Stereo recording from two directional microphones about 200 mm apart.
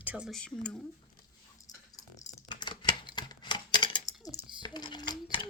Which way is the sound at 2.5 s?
20° left (ahead or behind).